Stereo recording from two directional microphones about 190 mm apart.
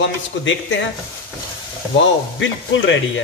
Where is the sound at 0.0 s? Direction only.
75° left (ahead or behind).